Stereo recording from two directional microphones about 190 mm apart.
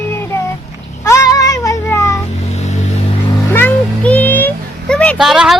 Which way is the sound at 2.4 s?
35° left (ahead or behind).